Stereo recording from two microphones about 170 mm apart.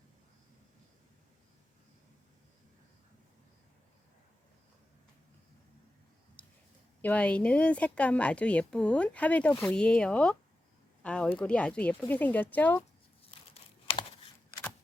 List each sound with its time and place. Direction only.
7.0 s a woman's voice: 10° left (ahead or behind)
13.5 s computer keyboard: 35° left (ahead or behind)